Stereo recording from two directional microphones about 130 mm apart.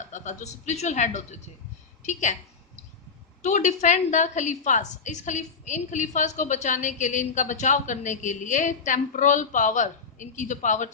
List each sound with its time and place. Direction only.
0.1 s speech: 65° left (ahead or behind)
3.4 s a woman's voice: 65° left (ahead or behind)